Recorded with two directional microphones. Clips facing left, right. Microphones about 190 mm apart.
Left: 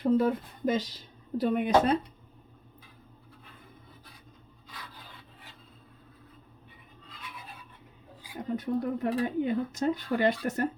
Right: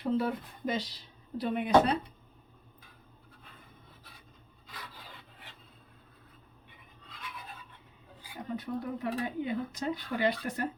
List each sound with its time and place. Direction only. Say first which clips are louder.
0.0 s speech: left 5 dB; 45° left (ahead or behind)
8.5 s speech: left 6 dB; 50° left (ahead or behind)